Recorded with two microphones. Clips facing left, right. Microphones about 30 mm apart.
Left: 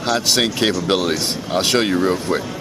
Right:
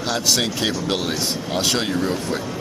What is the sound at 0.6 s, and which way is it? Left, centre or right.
Speech, left.